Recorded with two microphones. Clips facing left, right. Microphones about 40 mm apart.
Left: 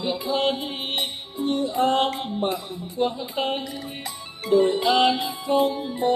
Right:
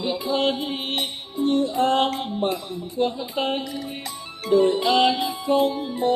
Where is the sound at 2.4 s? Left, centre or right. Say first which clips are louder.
Right 1 dB; centre.